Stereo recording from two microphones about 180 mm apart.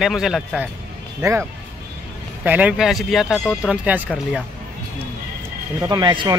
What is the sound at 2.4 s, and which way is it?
Speech, 10° right (ahead or behind).